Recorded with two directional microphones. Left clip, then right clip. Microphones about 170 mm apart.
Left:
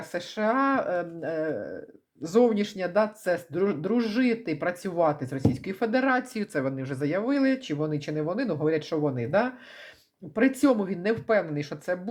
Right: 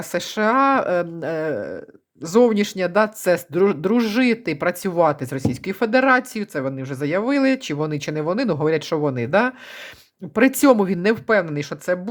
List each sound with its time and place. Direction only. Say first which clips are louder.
0.0 s speech: right 7 dB; 40° right (ahead or behind)
6.3 s speech: right 4 dB; 15° right (ahead or behind); by 11.9 s 35° right (ahead or behind)